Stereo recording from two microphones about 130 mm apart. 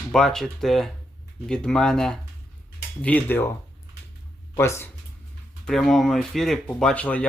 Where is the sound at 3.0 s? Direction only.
15° left (ahead or behind).